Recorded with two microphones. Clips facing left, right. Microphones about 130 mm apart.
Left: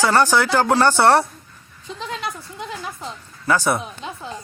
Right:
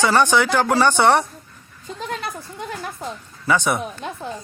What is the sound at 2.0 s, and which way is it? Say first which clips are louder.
Speech: right 1 dB; 50° right (ahead or behind).